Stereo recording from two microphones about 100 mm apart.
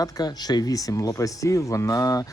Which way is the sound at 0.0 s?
40° left (ahead or behind).